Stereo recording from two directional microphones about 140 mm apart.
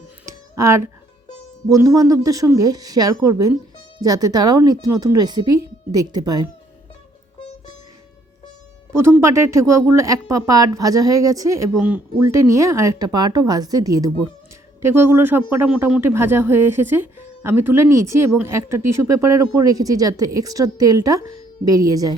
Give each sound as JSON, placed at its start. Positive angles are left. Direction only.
{"t": 0.3, "sound": "a sound", "side_deg": -20}
{"t": 1.6, "sound": "speech", "side_deg": -25}
{"t": 8.9, "sound": "speech", "side_deg": -20}
{"t": 11.8, "sound": "speech", "side_deg": -10}
{"t": 12.3, "sound": "speech", "side_deg": -20}